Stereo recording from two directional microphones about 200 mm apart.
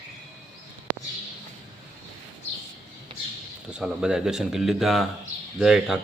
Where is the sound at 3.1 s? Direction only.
25° right (ahead or behind).